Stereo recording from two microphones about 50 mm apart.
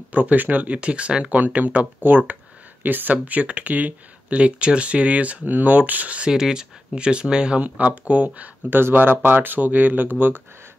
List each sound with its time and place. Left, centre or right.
0.1 s speech: right
1.3 s speech: right
6.3 s speech: centre; by 8.7 s right
8.7 s speech: right